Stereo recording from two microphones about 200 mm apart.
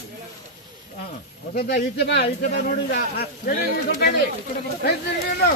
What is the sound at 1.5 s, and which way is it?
A man's voice, 50° left (ahead or behind).